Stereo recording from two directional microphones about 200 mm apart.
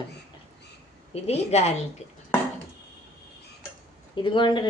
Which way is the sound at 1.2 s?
30° left (ahead or behind).